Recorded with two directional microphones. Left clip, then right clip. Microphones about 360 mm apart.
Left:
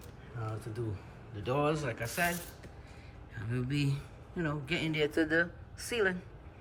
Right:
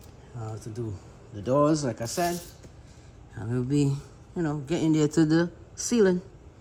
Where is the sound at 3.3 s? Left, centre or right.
Centre.